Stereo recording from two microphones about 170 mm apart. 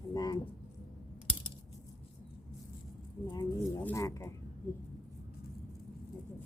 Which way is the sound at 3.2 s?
20° left (ahead or behind).